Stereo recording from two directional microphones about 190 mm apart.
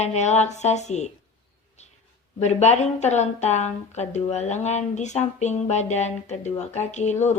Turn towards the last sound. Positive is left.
turn(degrees=35)  # may be behind; listen again after turning